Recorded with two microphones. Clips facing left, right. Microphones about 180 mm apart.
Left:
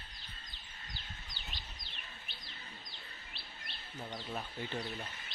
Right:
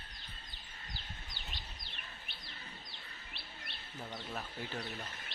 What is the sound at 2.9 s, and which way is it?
Bird, 60° right (ahead or behind).